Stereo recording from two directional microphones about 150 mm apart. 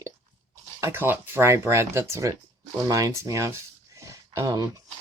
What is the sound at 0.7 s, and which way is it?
Speech, 15° right (ahead or behind).